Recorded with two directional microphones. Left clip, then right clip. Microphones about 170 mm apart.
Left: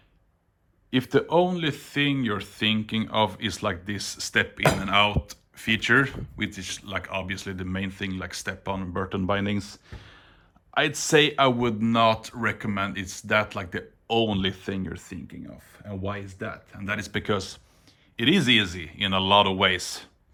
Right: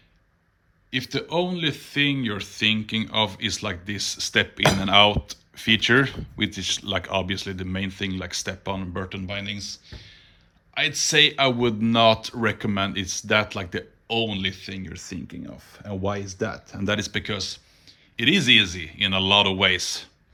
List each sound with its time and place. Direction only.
0.9 s speech: 10° left (ahead or behind); by 9.0 s 5° right (ahead or behind)
9.0 s speech: 15° left (ahead or behind)
11.3 s speech: centre (ahead or behind)
15.7 s speech: 20° right (ahead or behind)
17.1 s speech: centre (ahead or behind)